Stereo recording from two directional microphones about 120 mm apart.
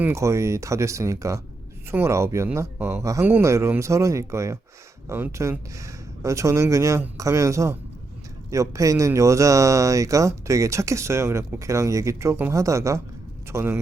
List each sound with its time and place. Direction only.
0.0 s speech: 25° right (ahead or behind)